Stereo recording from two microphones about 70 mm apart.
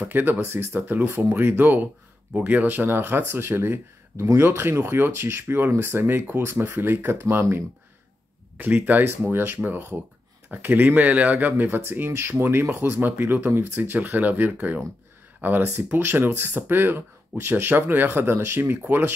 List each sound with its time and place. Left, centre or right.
0.0 s speech: right